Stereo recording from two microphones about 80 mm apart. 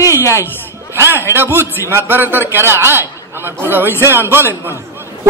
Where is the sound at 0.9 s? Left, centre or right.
Right.